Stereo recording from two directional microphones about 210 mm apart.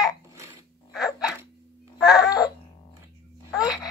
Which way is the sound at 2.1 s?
15° left (ahead or behind).